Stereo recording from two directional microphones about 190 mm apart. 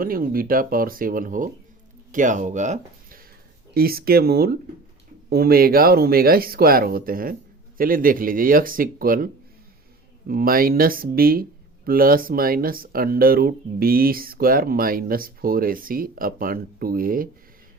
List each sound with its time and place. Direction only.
0.0 s speech: 50° right (ahead or behind)